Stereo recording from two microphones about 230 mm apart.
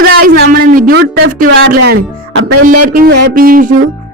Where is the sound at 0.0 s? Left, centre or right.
Right.